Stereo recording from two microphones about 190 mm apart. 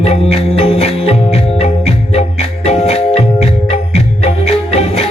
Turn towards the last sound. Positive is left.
turn(degrees=35)  # may be behind; listen again after turning